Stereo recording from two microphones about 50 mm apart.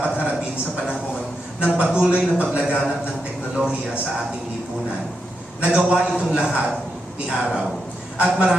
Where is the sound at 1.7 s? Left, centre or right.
Right.